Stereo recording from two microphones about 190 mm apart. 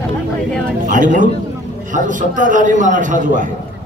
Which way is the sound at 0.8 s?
45° right (ahead or behind).